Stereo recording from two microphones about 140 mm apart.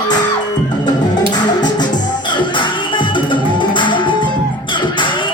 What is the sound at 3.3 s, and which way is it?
Music, 35° left (ahead or behind).